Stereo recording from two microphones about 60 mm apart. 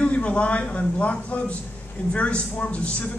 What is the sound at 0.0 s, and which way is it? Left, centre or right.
A man's voice, left.